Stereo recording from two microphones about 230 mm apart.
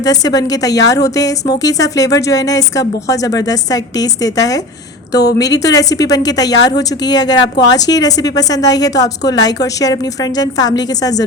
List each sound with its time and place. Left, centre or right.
0.0 s a woman's voice: centre